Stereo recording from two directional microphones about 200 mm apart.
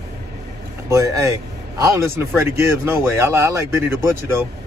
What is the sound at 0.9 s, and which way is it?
Speech, 15° right (ahead or behind).